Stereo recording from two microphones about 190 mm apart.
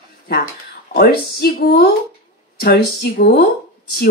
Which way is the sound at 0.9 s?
55° left (ahead or behind).